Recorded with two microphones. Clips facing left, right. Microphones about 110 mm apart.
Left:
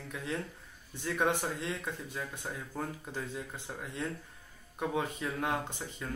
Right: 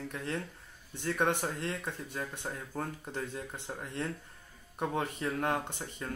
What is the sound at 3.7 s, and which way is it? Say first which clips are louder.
Speech: right 2 dB; 10° right (ahead or behind).